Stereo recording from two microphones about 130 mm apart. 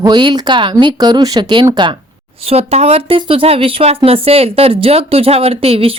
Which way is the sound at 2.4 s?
50° right (ahead or behind).